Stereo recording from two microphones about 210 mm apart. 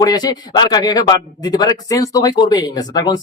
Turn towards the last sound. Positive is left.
turn(degrees=20)  # may be behind; listen again after turning